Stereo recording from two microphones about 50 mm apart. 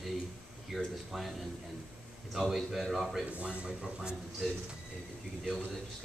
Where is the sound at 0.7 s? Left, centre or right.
Centre.